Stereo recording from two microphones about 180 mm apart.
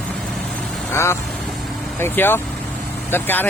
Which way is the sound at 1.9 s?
10° left (ahead or behind).